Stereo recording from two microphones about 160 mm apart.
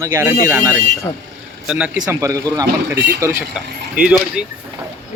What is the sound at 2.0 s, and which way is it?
Speech, 20° right (ahead or behind).